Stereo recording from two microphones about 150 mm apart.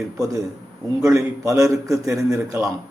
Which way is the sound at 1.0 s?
20° right (ahead or behind).